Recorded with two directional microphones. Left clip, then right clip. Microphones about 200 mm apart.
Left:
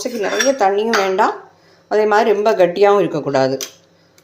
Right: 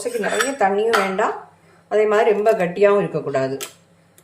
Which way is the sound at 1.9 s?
35° left (ahead or behind).